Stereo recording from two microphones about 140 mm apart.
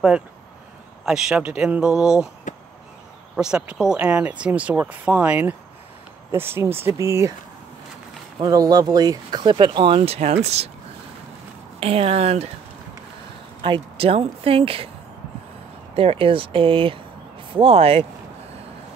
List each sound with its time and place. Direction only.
1.0 s speech: 5° right (ahead or behind)
2.5 s a sound: 65° left (ahead or behind)
3.3 s speech: 5° right (ahead or behind); by 7.3 s 20° right (ahead or behind)
8.4 s speech: 25° right (ahead or behind); by 10.7 s 50° right (ahead or behind)
11.8 s speech: 45° right (ahead or behind)
13.6 s speech: 35° right (ahead or behind)
15.9 s speech: 40° right (ahead or behind)